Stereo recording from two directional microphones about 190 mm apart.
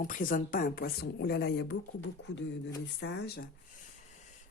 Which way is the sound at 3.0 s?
60° left (ahead or behind).